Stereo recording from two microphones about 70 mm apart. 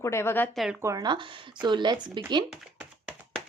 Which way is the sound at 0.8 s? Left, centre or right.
Right.